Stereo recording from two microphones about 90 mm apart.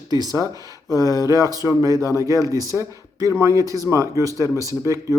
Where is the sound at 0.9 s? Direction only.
40° left (ahead or behind).